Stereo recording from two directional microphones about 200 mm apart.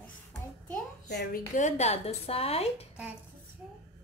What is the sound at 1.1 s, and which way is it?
Speech, 55° left (ahead or behind).